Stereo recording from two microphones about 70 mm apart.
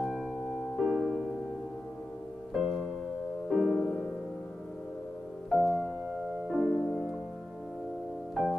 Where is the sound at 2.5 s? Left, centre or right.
Centre.